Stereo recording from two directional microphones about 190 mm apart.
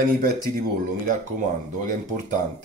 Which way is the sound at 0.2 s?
50° right (ahead or behind).